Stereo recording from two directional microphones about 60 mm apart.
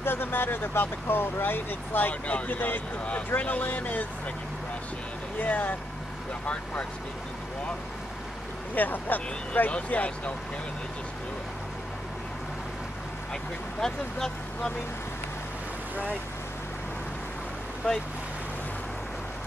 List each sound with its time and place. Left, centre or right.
0.0 s speech: left
5.4 s speech: left
8.7 s speech: left
13.3 s speech: centre
17.8 s speech: centre